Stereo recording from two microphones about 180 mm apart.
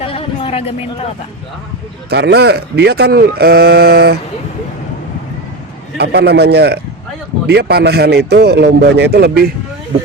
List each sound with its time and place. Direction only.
0.0 s a sound: 30° left (ahead or behind)
2.0 s speech: 65° right (ahead or behind)
6.0 s speech: 65° right (ahead or behind)